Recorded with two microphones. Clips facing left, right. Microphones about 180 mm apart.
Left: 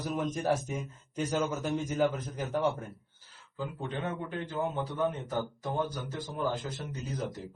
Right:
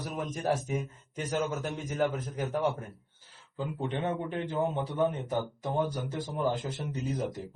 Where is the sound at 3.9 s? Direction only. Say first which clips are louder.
Right 4 dB; 25° right (ahead or behind).